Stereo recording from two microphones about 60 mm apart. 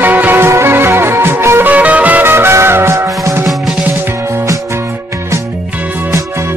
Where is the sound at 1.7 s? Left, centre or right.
Right.